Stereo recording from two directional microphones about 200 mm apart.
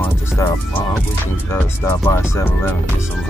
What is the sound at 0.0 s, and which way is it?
Speech, 10° left (ahead or behind).